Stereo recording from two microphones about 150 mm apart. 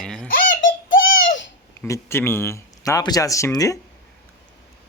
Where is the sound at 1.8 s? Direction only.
20° left (ahead or behind).